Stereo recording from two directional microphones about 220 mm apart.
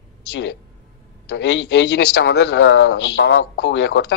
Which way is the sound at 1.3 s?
50° left (ahead or behind).